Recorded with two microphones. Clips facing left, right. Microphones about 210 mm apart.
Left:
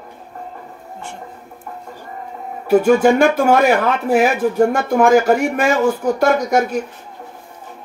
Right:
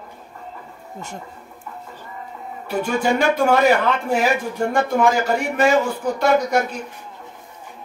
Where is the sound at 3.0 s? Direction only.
45° left (ahead or behind).